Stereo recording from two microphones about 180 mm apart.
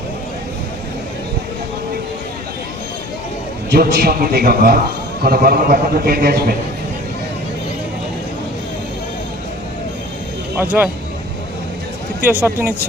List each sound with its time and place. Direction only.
3.7 s a man's voice: 55° right (ahead or behind)
10.6 s speech: 10° right (ahead or behind)
12.2 s speech: 10° right (ahead or behind)